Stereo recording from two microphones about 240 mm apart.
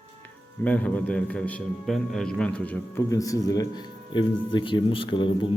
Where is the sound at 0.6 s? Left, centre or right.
Centre.